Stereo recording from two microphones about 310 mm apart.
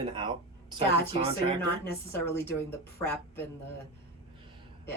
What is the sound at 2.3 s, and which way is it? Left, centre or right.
Speech, centre.